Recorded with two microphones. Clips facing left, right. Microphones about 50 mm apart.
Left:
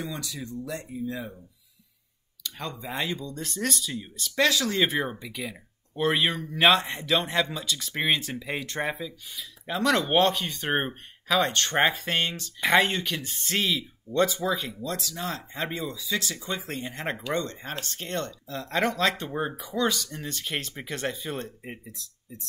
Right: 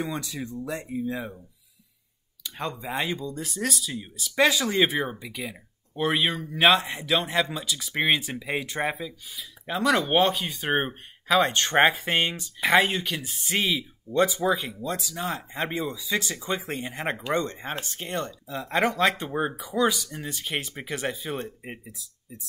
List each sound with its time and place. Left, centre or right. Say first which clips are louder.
0.0 s speech: right 4 dB; right
2.4 s speech: right 3 dB; centre
4.4 s speech: right 2 dB; centre
17.8 s speech: right 1 dB; centre